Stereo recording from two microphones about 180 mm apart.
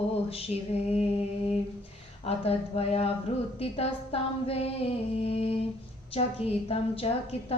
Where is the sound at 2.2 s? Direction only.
35° left (ahead or behind).